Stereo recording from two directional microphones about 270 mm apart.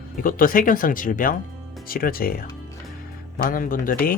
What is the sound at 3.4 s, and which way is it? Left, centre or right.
Speech, left.